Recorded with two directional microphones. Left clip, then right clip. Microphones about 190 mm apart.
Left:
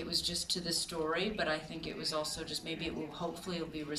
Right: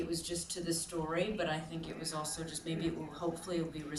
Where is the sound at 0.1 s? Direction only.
30° left (ahead or behind).